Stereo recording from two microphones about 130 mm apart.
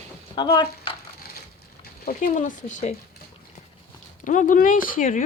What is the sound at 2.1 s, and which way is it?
Speech, 80° left.